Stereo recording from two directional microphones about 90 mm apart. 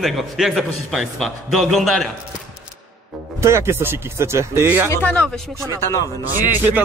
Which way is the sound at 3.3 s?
30° right (ahead or behind).